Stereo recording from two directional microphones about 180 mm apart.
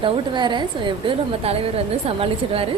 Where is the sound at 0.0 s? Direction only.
25° right (ahead or behind).